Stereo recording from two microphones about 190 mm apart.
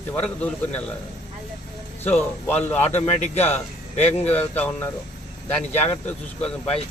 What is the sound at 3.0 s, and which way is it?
Speech, 35° left (ahead or behind).